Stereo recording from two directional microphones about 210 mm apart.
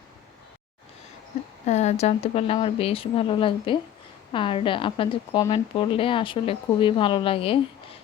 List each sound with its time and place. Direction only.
1.6 s a woman's voice: 30° left (ahead or behind)